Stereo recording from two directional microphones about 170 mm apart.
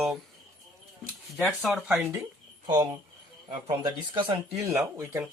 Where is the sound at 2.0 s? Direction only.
15° right (ahead or behind).